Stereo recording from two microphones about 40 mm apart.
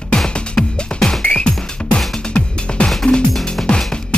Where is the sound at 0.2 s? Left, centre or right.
Centre.